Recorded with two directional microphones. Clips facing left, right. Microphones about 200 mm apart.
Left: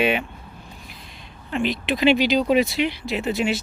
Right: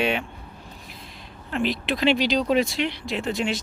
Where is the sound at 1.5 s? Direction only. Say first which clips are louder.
Left 2 dB; centre (ahead or behind).